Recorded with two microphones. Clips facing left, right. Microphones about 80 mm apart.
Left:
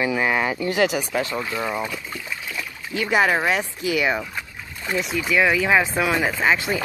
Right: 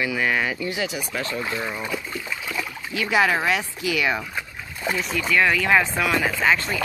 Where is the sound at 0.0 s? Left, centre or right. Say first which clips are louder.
Left 2 dB; left.